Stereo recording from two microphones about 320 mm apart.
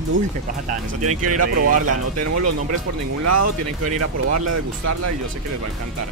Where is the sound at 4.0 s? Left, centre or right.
Right.